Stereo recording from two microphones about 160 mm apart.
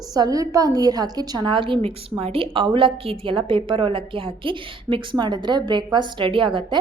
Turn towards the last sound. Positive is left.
turn(degrees=-30)  # may be behind; listen again after turning